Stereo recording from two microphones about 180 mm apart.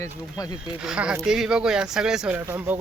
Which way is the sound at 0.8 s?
5° right (ahead or behind).